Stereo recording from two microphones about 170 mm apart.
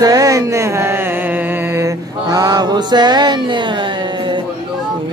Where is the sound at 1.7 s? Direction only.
20° right (ahead or behind).